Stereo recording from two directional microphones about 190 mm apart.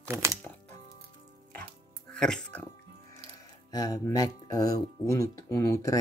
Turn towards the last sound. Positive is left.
turn(degrees=15)  # may be behind; listen again after turning